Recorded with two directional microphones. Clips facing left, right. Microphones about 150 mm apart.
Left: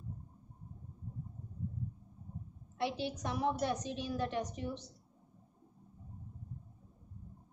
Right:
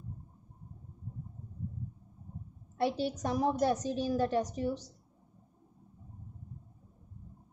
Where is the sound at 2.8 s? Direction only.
40° right (ahead or behind).